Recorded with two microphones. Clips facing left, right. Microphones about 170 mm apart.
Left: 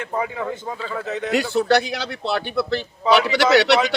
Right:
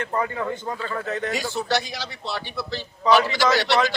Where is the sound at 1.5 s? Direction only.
60° left (ahead or behind).